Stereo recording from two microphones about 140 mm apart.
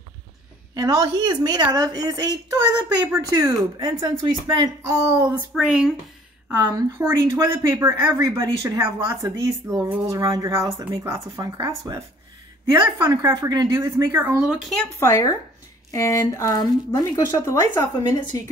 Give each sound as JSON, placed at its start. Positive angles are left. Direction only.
{"t": 0.7, "sound": "speech", "side_deg": -25}
{"t": 5.6, "sound": "speech", "side_deg": -5}
{"t": 6.5, "sound": "speech", "side_deg": -15}
{"t": 13.2, "sound": "speech", "side_deg": -20}
{"t": 14.6, "sound": "speech", "side_deg": 5}
{"t": 15.0, "sound": "speech", "side_deg": 20}